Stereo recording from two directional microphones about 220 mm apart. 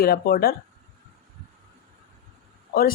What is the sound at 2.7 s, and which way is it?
Speech, 40° left (ahead or behind).